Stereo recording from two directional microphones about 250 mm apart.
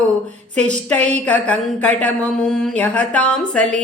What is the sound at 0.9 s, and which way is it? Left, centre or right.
Speech, right.